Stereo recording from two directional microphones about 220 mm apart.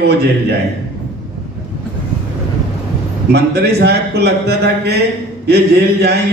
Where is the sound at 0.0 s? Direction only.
50° right (ahead or behind).